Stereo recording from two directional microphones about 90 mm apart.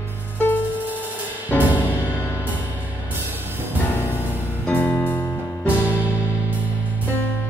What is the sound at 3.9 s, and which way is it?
Music, 20° left (ahead or behind).